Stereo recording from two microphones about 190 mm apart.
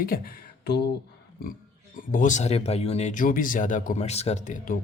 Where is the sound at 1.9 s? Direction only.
45° left (ahead or behind).